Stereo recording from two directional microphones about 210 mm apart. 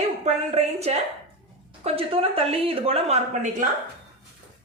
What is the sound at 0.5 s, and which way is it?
A woman's voice, 30° right (ahead or behind).